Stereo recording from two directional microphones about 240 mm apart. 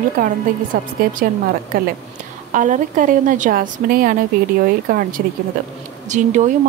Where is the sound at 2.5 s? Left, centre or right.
Right.